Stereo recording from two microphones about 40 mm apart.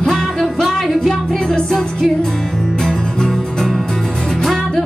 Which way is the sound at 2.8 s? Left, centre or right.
Centre.